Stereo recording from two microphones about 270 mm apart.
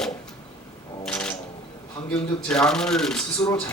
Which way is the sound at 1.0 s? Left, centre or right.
Centre.